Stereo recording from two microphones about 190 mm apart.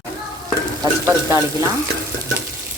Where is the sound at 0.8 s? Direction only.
15° right (ahead or behind).